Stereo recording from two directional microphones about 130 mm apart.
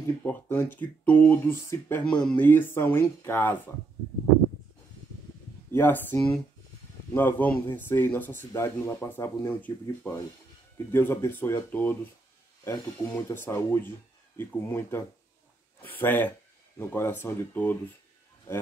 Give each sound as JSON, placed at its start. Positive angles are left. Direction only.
{"t": 0.2, "sound": "speech", "side_deg": 15}
{"t": 5.7, "sound": "speech", "side_deg": 15}